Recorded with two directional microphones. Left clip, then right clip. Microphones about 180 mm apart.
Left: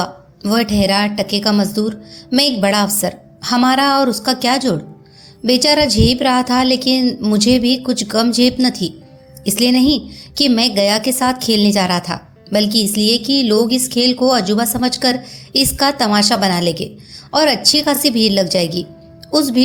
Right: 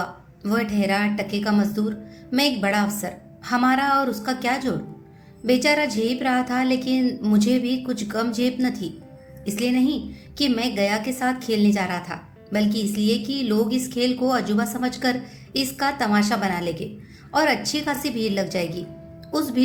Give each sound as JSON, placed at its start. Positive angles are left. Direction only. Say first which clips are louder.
{"t": 0.0, "sound": "a woman's voice", "louder": "left 8 dB", "side_deg": 40}